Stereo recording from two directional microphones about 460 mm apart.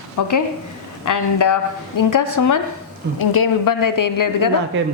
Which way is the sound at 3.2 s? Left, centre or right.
Left.